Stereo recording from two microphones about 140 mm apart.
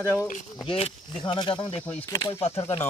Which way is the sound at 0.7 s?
40° left (ahead or behind).